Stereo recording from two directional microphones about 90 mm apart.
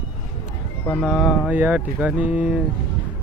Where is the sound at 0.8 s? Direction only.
20° left (ahead or behind).